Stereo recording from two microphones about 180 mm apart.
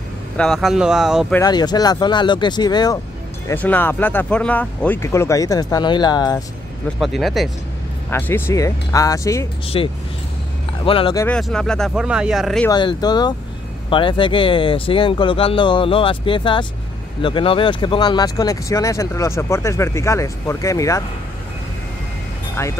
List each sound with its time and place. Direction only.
0.4 s speech: centre (ahead or behind)
1.4 s speech: 20° left (ahead or behind)
3.4 s speech: 10° left (ahead or behind)
7.0 s speech: centre (ahead or behind)
8.1 s speech: 10° left (ahead or behind)
9.7 s speech: 30° left (ahead or behind)
11.2 s speech: 5° left (ahead or behind)
12.6 s speech: 25° left (ahead or behind)